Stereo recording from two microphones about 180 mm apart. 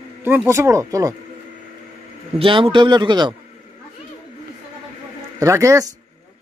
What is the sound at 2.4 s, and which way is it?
Speech, 30° right (ahead or behind).